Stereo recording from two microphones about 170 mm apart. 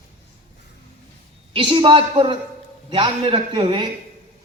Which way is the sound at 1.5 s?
30° right (ahead or behind).